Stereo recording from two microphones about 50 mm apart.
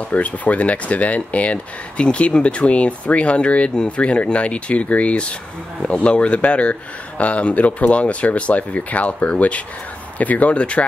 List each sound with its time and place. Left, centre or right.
0.1 s speech: left